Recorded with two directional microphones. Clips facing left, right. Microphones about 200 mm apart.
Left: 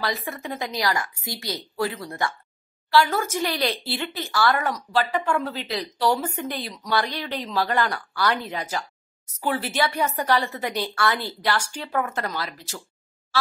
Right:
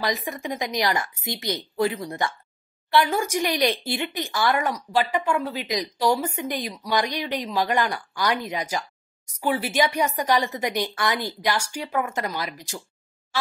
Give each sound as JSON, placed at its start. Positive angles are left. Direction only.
{"t": 0.0, "sound": "speech", "side_deg": -15}